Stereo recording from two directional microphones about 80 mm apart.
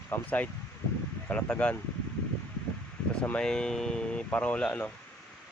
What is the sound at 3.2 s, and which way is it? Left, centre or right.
Speech, centre.